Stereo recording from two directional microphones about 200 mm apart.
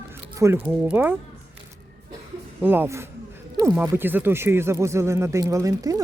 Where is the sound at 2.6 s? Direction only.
10° right (ahead or behind).